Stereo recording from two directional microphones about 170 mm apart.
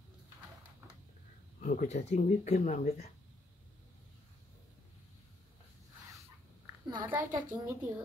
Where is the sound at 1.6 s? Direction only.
45° left (ahead or behind).